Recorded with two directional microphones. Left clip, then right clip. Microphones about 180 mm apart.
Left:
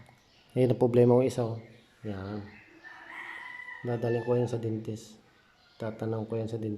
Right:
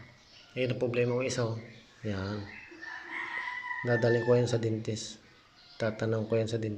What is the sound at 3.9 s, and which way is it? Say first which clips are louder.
Speech: right 3 dB; 10° left (ahead or behind).